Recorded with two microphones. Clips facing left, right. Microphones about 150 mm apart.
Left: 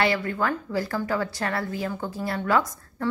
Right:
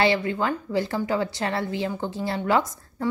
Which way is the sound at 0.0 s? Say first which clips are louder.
Right 2 dB; 25° right (ahead or behind).